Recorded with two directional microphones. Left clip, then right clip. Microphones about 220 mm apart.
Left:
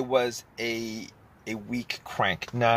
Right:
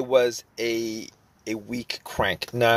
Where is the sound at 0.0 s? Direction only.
45° right (ahead or behind).